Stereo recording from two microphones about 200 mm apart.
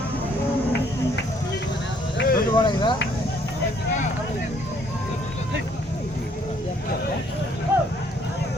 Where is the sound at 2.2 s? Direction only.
50° left (ahead or behind).